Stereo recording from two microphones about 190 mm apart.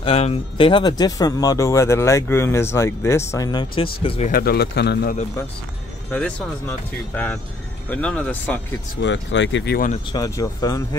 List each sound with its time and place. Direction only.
0.0 s speech: 30° left (ahead or behind)
4.3 s speech: 55° left (ahead or behind)
7.9 s speech: 5° left (ahead or behind)
9.0 s speech: 70° left (ahead or behind)
10.1 s speech: 20° left (ahead or behind)